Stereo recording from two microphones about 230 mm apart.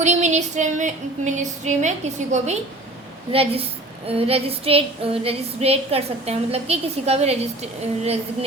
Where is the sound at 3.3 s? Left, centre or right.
Right.